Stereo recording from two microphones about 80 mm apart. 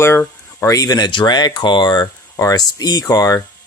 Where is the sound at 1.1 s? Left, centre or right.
Left.